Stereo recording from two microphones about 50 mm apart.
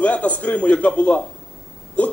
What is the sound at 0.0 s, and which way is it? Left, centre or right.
Speech, left.